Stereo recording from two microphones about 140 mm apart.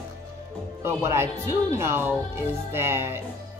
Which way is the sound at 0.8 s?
20° right (ahead or behind).